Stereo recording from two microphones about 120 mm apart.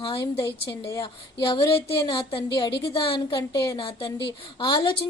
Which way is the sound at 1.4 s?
40° left (ahead or behind).